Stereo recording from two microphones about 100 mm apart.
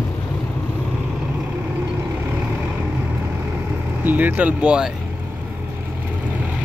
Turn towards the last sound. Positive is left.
turn(degrees=-10)  # may be behind; listen again after turning